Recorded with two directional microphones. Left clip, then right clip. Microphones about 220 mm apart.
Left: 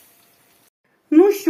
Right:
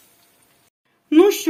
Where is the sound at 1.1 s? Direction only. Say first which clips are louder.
Even; 30° right (ahead or behind).